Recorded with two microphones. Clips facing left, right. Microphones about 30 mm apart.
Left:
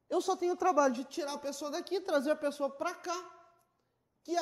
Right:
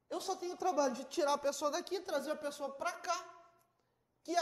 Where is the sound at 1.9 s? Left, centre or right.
Left.